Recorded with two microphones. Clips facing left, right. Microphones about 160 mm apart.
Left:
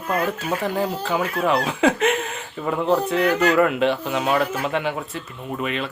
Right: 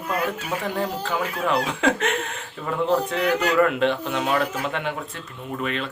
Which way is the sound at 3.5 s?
5° left (ahead or behind).